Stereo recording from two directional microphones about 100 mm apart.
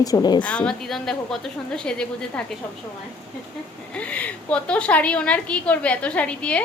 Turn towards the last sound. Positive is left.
turn(degrees=10)  # may be behind; listen again after turning